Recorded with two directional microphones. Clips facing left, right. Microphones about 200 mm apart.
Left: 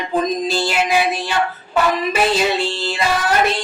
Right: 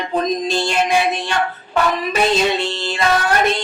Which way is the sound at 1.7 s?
5° left (ahead or behind).